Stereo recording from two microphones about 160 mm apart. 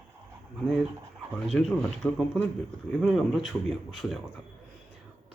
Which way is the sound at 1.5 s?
5° left (ahead or behind).